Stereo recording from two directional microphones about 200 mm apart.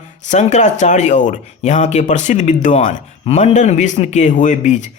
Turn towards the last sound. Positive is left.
turn(degrees=35)  # may be behind; listen again after turning